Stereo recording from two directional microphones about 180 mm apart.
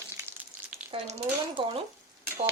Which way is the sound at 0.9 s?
30° right (ahead or behind).